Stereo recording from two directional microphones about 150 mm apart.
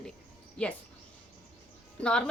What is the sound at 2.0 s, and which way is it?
Speech, 5° left (ahead or behind).